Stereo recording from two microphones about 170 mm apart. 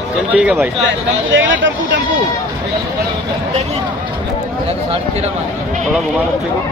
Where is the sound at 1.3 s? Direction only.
90° right.